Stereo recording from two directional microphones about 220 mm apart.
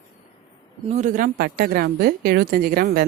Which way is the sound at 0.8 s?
35° right (ahead or behind).